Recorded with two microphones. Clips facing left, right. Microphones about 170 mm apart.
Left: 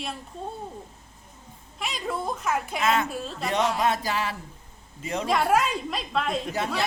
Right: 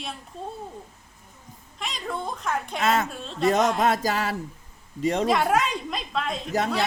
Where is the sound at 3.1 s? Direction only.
5° left (ahead or behind).